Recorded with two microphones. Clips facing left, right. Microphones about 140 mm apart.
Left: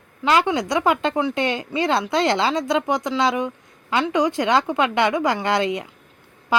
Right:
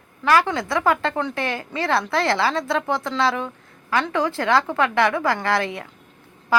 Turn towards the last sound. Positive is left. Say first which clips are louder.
# left 2 dB
turn(degrees=20)  # may be behind; listen again after turning